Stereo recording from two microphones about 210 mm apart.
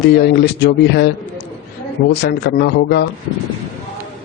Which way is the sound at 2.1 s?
50° left (ahead or behind).